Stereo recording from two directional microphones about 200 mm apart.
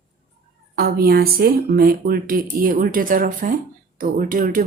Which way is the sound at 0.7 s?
50° right (ahead or behind).